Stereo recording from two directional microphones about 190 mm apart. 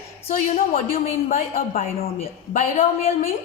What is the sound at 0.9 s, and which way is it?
A woman's voice, 45° left (ahead or behind).